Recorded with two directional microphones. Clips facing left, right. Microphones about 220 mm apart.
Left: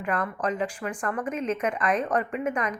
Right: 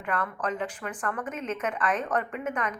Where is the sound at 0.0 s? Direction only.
10° left (ahead or behind).